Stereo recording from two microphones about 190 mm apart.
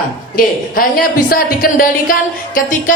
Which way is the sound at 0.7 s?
50° left (ahead or behind).